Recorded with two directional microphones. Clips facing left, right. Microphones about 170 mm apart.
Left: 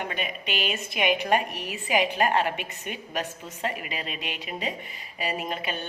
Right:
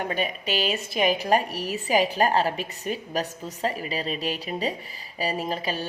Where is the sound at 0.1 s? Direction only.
35° right (ahead or behind).